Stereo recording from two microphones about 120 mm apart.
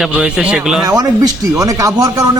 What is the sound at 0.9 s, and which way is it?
Speech, 30° right (ahead or behind).